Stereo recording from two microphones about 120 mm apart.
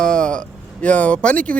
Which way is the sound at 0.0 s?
10° left (ahead or behind).